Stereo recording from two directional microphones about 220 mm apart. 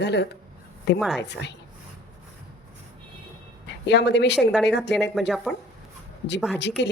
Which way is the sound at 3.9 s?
50° left (ahead or behind).